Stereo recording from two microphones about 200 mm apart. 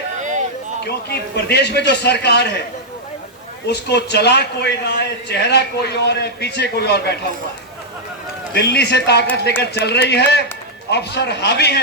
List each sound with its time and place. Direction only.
0.2 s a sound: 40° right (ahead or behind)
0.9 s a man's voice: 55° left (ahead or behind)
3.7 s a man's voice: 55° left (ahead or behind)
8.5 s a man's voice: 55° left (ahead or behind)